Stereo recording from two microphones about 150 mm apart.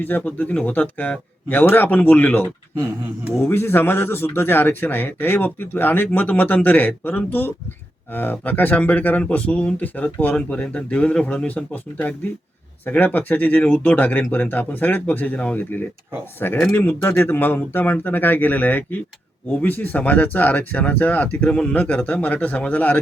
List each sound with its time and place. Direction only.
0.0 s speech: 10° left (ahead or behind)
2.7 s speech: 15° right (ahead or behind)
3.4 s speech: 15° left (ahead or behind)